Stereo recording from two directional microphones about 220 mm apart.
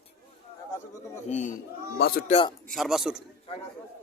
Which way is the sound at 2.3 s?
25° left (ahead or behind).